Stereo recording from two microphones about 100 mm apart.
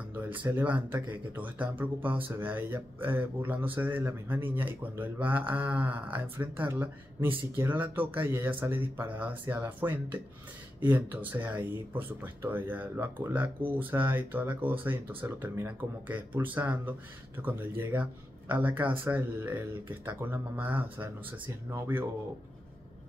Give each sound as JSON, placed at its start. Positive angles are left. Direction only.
{"t": 0.1, "sound": "speech", "side_deg": -20}